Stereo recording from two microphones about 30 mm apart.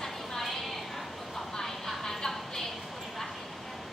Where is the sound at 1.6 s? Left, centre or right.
Centre.